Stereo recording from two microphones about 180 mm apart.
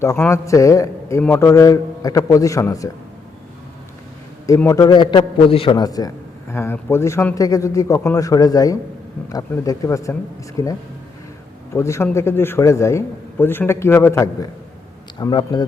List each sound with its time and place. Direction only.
0.0 s speech: 15° left (ahead or behind)
4.4 s a man's voice: 15° left (ahead or behind)
15.2 s a man's voice: 25° left (ahead or behind)